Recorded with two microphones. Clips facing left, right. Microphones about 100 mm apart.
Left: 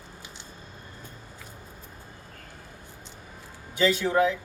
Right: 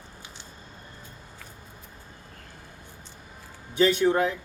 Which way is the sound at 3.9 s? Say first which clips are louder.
Right 1 dB; 35° right (ahead or behind).